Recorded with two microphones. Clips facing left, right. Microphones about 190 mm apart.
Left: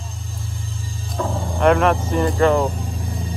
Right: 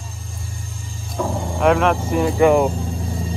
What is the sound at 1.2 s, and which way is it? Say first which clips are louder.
Music: right 1 dB; 15° right (ahead or behind).